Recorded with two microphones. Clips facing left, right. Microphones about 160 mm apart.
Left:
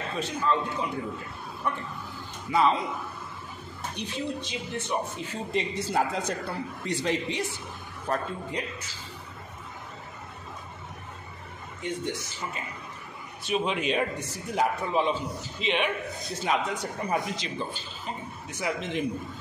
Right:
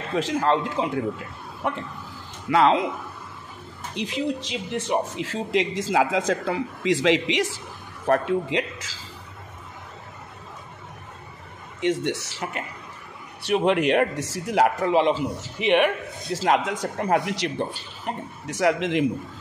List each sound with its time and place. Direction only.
0.1 s speech: 90° right
3.9 s speech: 90° right
11.8 s a man's voice: 85° right; by 15.9 s 65° right (ahead or behind)
16.3 s speech: 90° right